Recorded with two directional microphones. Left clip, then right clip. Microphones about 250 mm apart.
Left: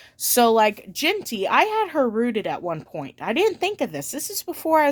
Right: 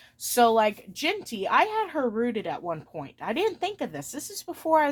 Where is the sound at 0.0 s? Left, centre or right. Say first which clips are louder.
Left 3 dB; left.